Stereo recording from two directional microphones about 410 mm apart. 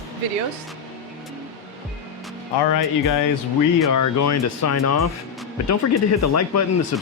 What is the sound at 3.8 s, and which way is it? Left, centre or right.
Speech, left.